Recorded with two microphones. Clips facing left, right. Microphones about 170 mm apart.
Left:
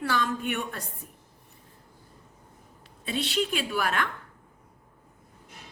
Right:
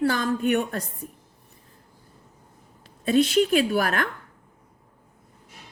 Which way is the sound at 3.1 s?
45° right (ahead or behind).